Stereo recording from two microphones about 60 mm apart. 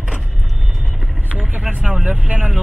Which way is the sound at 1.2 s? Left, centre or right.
Right.